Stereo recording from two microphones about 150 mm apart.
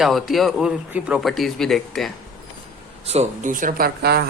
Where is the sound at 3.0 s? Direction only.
45° right (ahead or behind); by 4.2 s 90° right.